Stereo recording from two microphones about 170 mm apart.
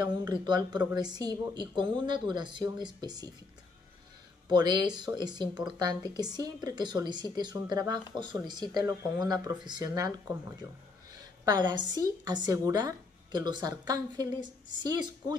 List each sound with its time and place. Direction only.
0.0 s a woman's voice: 25° right (ahead or behind)
4.5 s a woman's voice: 25° right (ahead or behind)
11.4 s a woman's voice: 25° right (ahead or behind)